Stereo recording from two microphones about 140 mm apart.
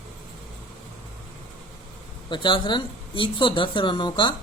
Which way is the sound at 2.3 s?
35° left (ahead or behind).